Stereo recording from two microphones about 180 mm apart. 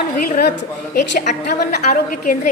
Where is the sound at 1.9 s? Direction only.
50° left (ahead or behind).